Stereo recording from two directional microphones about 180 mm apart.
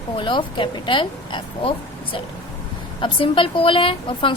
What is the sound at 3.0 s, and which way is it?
A woman's voice, 30° left (ahead or behind).